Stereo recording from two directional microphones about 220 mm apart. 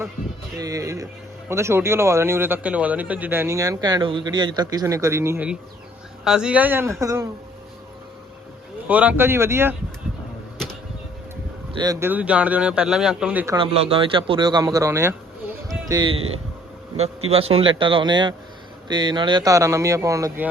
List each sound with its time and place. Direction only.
0.6 s speech: 15° right (ahead or behind)
8.9 s speech: 5° right (ahead or behind)
11.7 s a man's voice: 15° right (ahead or behind)
13.6 s speech: 25° right (ahead or behind)
17.2 s speech: 25° right (ahead or behind)